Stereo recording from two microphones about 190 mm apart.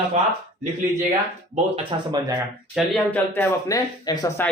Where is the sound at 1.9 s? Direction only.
25° right (ahead or behind).